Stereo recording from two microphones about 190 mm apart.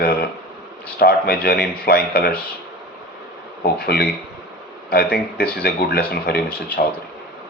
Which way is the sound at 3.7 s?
55° left (ahead or behind).